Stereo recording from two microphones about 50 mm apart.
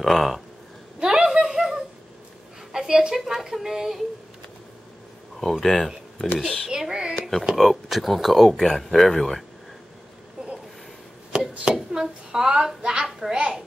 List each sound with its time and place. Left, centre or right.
0.0 s speech: centre
0.9 s a sound: centre
3.2 s speech: centre
5.4 s speech: centre
6.7 s speech: centre
7.5 s speech: centre
11.6 s speech: centre